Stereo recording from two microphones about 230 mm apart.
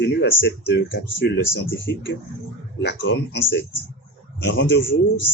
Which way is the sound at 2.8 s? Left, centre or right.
Left.